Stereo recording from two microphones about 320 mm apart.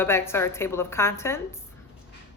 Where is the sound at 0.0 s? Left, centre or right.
Centre.